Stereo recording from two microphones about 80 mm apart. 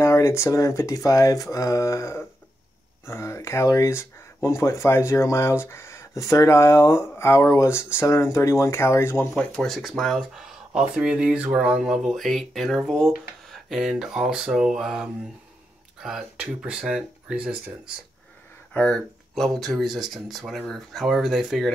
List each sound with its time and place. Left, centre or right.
0.0 s speech: left
9.3 s speech: centre
18.7 s speech: centre
19.4 s speech: centre